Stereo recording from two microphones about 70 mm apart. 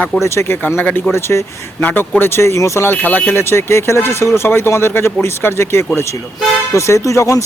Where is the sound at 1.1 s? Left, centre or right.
Left.